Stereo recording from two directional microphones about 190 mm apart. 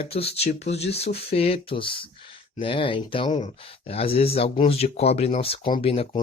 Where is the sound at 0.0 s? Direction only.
30° left (ahead or behind).